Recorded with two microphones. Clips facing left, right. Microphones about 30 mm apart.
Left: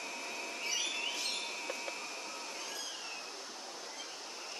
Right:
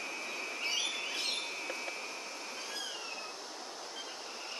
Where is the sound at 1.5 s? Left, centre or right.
Centre.